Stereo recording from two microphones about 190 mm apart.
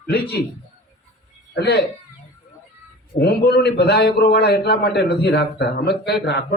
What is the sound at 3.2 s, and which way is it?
A man's voice, 60° left (ahead or behind).